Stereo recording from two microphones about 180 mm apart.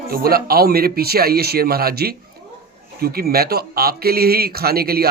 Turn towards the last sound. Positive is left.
turn(degrees=-60)  # may be behind; listen again after turning